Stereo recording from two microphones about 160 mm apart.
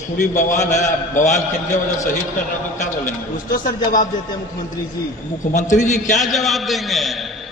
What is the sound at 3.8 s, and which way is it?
Speech, 55° left (ahead or behind).